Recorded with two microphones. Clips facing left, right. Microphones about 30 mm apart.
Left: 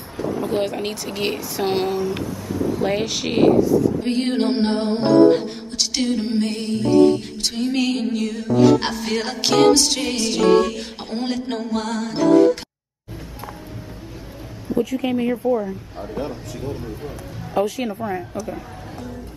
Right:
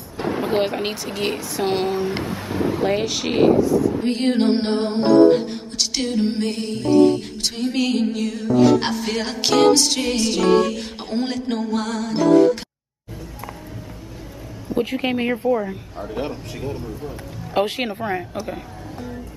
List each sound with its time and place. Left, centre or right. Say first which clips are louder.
0.2 s a sound: right 1 dB; right
0.7 s speech: right 1 dB; right
1.0 s music: even; centre
2.1 s speech: right 1 dB; right
2.8 s music: right 1 dB; centre
14.7 s speech: left 1 dB; right
16.2 s speech: right 1 dB; right
17.6 s a woman's voice: even; right